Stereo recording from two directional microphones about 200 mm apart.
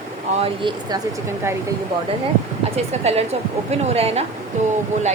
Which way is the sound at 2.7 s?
30° right (ahead or behind).